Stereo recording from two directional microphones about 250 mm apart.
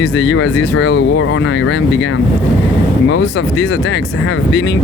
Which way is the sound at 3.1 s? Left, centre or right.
Left.